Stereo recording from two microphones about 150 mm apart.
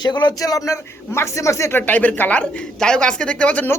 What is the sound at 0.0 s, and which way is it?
A man's voice, 30° left (ahead or behind).